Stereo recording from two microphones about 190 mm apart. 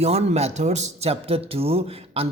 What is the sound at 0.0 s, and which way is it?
Speech, 35° right (ahead or behind).